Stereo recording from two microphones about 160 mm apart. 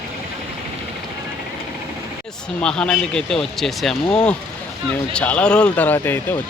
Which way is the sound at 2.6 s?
5° left (ahead or behind).